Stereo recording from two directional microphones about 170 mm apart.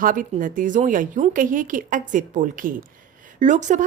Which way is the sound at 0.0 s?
50° right (ahead or behind).